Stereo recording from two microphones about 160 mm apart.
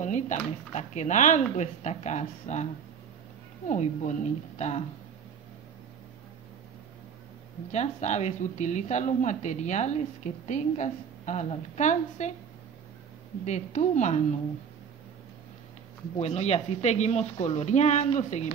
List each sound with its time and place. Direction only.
0.0 s a woman's voice: 50° left (ahead or behind)
7.7 s a woman's voice: 45° left (ahead or behind)
13.5 s a woman's voice: 50° left (ahead or behind)
16.2 s a woman's voice: 40° left (ahead or behind)